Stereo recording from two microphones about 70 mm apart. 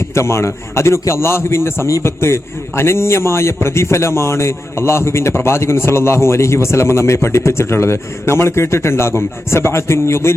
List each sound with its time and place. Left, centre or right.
0.1 s a man's voice: left